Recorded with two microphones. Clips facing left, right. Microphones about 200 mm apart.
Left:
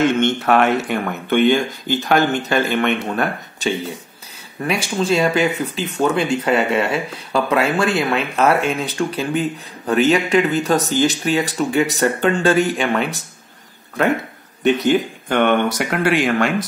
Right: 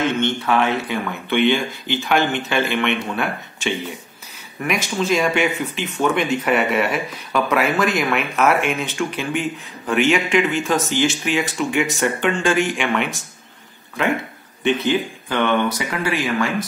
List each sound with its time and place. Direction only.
0.0 s speech: 55° left (ahead or behind); by 13.2 s 35° left (ahead or behind)
14.6 s speech: 45° left (ahead or behind); by 16.5 s 70° left (ahead or behind)